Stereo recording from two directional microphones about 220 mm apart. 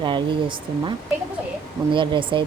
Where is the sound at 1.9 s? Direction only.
20° right (ahead or behind).